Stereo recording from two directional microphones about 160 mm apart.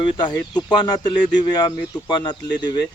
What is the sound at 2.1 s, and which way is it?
Speech, 25° left (ahead or behind).